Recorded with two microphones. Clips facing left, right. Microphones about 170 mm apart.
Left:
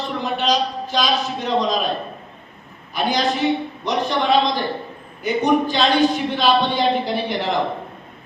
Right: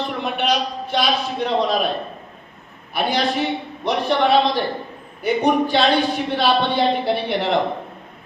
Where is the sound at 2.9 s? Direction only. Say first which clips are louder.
Even; 60° right (ahead or behind).